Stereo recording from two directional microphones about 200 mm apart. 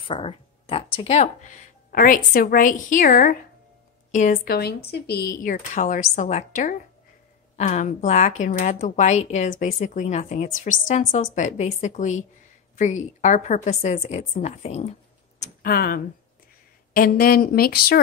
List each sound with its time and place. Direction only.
0.0 s a woman's voice: 25° left (ahead or behind); by 5.3 s 55° left (ahead or behind)
5.4 s a woman's voice: 40° left (ahead or behind)
15.7 s a woman's voice: 50° left (ahead or behind)